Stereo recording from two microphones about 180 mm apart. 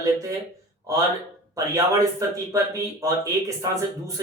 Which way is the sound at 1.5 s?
20° right (ahead or behind).